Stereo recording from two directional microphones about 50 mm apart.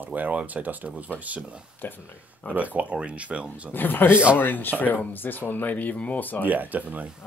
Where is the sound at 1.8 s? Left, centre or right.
Left.